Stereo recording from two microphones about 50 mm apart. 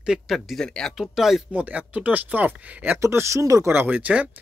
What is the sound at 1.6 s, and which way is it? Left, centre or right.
Speech, right.